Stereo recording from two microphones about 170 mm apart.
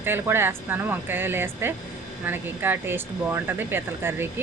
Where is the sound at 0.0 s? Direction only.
15° right (ahead or behind).